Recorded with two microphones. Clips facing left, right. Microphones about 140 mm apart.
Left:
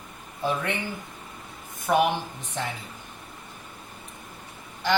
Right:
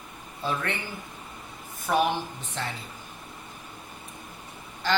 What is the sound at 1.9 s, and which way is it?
Speech, 15° left (ahead or behind).